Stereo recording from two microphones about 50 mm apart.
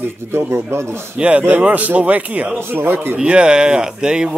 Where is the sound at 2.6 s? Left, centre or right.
Right.